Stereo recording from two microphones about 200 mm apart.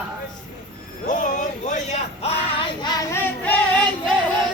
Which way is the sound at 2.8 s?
15° left (ahead or behind).